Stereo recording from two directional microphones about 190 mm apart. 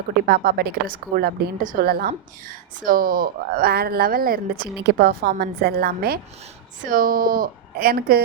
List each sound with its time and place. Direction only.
0.3 s speech: 55° right (ahead or behind)